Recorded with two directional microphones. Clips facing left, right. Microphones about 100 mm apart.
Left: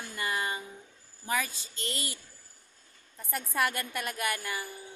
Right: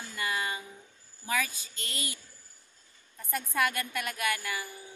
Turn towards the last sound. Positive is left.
turn(degrees=25)  # may be behind; listen again after turning